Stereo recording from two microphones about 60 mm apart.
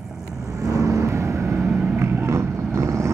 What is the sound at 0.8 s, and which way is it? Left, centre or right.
Vehicle, right.